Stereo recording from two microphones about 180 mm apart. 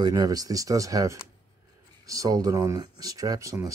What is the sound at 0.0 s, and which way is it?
Speech, 20° right (ahead or behind).